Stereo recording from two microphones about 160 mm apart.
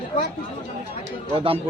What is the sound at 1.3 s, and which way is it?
Speech, 35° right (ahead or behind).